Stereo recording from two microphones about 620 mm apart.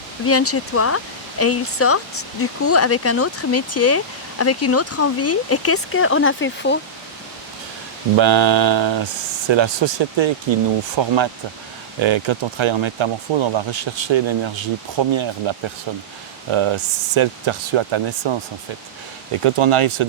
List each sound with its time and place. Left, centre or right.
0.3 s speech: left
8.2 s speech: right